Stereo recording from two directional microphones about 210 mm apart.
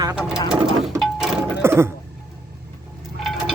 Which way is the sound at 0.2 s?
5° right (ahead or behind).